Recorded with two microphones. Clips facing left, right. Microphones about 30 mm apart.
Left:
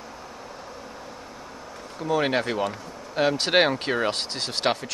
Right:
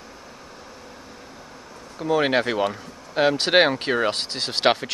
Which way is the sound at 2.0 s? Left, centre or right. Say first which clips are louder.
Right 3 dB; centre.